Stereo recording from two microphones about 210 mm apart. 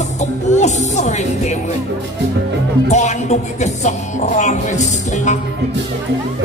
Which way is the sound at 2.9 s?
35° left (ahead or behind).